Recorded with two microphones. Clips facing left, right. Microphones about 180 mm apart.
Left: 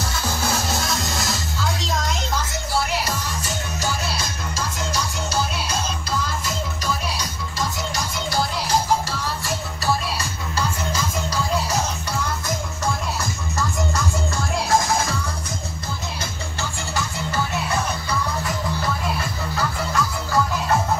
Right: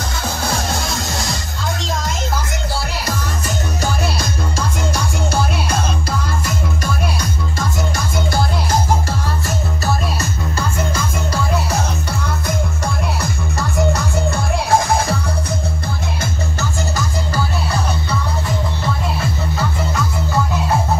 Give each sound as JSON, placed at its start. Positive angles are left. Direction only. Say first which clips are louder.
{"t": 0.7, "sound": "music", "louder": "right 2 dB", "side_deg": 0}
{"t": 3.4, "sound": "music", "louder": "right 6 dB", "side_deg": -60}
{"t": 12.4, "sound": "music", "louder": "right 3 dB", "side_deg": -60}